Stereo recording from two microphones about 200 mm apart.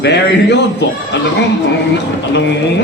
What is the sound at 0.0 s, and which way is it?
Speech, 60° left (ahead or behind).